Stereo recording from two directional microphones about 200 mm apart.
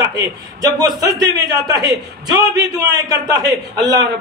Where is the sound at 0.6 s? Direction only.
20° right (ahead or behind).